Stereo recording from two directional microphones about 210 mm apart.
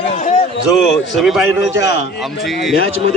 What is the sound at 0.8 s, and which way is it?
Speech, centre (ahead or behind).